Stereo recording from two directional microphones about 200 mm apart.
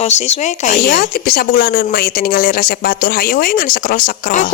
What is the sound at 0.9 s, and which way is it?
Speech, 55° left (ahead or behind).